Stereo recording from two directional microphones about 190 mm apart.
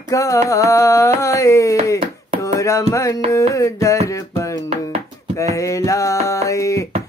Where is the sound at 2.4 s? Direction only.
15° left (ahead or behind).